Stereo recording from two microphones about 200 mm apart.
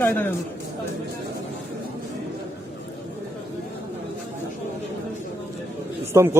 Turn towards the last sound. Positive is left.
turn(degrees=-15)  # may be behind; listen again after turning